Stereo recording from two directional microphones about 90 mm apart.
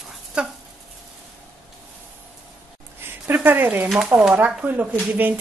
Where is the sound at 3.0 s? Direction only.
25° right (ahead or behind).